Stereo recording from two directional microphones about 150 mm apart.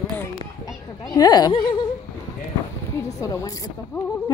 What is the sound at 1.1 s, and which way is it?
Speech, 25° left (ahead or behind).